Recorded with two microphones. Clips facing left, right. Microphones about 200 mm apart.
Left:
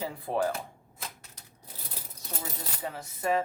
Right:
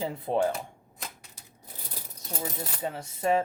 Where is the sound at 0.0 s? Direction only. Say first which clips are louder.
Right 3 dB; 20° right (ahead or behind).